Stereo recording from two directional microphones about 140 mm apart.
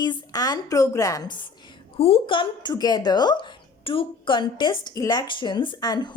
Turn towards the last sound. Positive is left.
turn(degrees=30)  # may be behind; listen again after turning